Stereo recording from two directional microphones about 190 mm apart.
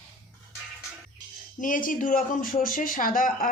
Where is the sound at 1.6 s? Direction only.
45° left (ahead or behind).